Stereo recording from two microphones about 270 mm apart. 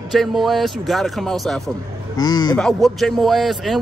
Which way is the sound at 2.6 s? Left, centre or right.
Centre.